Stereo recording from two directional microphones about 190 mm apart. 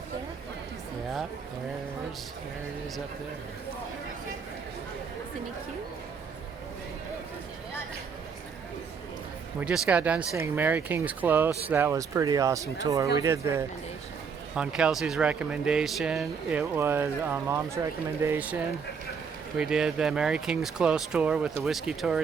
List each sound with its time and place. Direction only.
9.6 s speech: 5° right (ahead or behind)
14.5 s speech: 5° right (ahead or behind)
16.5 s speech: 10° right (ahead or behind)